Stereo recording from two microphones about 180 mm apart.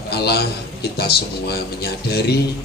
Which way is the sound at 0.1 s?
65° left (ahead or behind).